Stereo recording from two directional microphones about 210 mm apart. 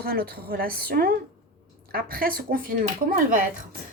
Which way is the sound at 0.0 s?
50° right (ahead or behind).